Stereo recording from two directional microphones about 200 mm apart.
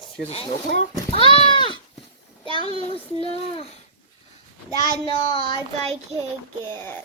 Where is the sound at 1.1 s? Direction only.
25° left (ahead or behind).